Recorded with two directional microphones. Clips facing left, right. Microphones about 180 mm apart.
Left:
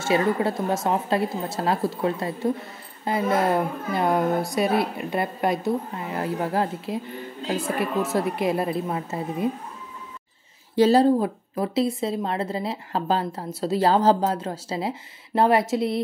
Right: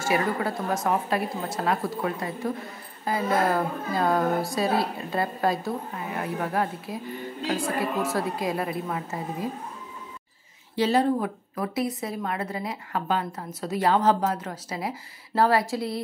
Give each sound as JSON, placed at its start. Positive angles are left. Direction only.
{"t": 0.0, "sound": "speech", "side_deg": 25}
{"t": 10.8, "sound": "speech", "side_deg": 35}